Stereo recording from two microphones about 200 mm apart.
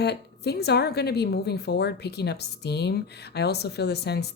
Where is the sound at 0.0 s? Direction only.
55° left (ahead or behind).